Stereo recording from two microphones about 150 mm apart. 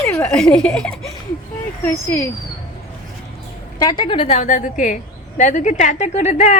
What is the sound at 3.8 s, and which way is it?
Speech, 30° left (ahead or behind).